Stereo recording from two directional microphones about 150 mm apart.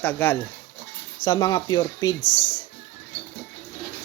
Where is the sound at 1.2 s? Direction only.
25° left (ahead or behind).